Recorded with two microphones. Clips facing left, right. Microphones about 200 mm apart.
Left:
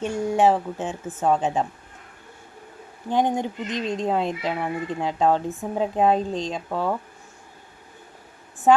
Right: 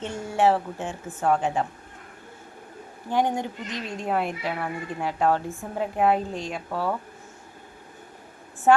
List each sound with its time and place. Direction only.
0.0 s speech: 15° left (ahead or behind)
3.1 s speech: 20° left (ahead or behind)